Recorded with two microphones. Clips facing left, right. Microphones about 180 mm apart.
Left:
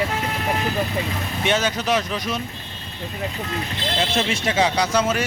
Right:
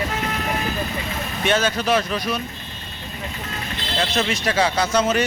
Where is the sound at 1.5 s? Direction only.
15° left (ahead or behind).